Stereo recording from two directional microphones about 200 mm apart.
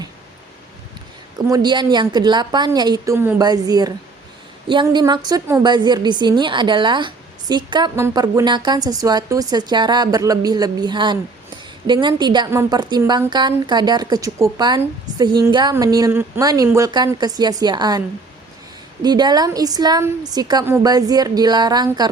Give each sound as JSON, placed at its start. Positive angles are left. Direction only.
{"t": 1.5, "sound": "a woman's voice", "side_deg": -20}
{"t": 19.0, "sound": "a woman's voice", "side_deg": -20}